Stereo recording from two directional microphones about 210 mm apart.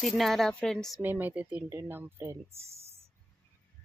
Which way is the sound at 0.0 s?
Centre (ahead or behind).